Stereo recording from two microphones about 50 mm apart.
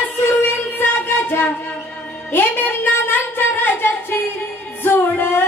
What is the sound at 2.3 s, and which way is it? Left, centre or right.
Speech, left.